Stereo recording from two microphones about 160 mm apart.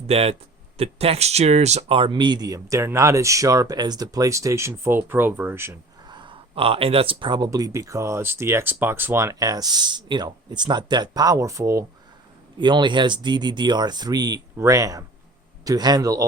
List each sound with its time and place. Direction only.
0.1 s speech: 40° right (ahead or behind); by 5.7 s 15° right (ahead or behind)
6.1 s speech: 30° right (ahead or behind)
12.5 s speech: 30° right (ahead or behind)